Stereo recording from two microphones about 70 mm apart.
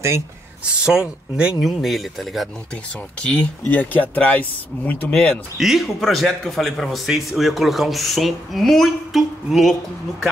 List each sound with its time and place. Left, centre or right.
0.7 s speech: centre
1.6 s a man's voice: centre
3.2 s speech: centre
3.7 s speech: left
5.1 s speech: centre
5.6 s a man's voice: centre